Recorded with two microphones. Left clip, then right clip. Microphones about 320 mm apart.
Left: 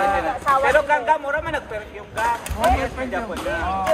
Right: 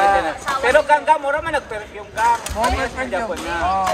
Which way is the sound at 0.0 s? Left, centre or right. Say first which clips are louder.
Right 3 dB; right.